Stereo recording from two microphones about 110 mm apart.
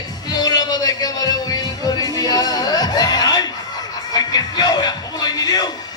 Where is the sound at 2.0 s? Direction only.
35° left (ahead or behind).